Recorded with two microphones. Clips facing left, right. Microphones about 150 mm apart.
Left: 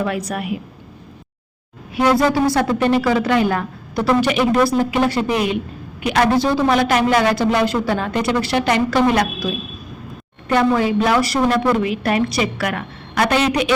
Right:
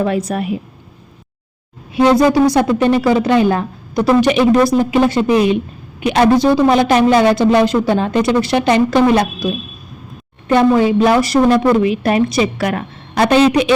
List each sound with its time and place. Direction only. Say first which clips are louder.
0.0 s a woman's voice: right 5 dB; 25° right (ahead or behind)
1.9 s a woman's voice: right 5 dB; 25° right (ahead or behind)
10.5 s a woman's voice: right 5 dB; 25° right (ahead or behind)